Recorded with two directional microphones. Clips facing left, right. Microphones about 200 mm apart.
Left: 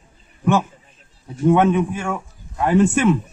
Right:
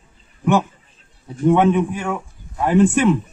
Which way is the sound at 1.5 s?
Centre (ahead or behind).